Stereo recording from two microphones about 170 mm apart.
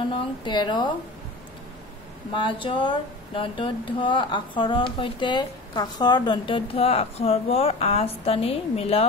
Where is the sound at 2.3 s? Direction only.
30° left (ahead or behind).